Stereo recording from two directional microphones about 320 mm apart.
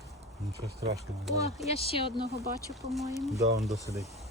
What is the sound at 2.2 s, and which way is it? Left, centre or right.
Speech, centre.